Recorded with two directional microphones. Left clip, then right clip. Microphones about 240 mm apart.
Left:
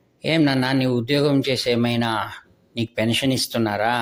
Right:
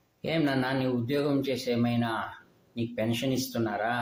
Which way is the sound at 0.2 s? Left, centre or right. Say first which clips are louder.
Left 8 dB; left.